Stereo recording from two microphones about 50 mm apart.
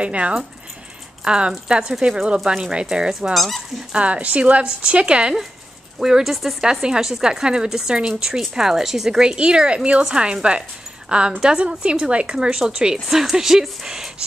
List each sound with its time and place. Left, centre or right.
0.0 s a woman's voice: right
3.3 s speech: centre
3.9 s a woman's voice: right
5.9 s a woman's voice: centre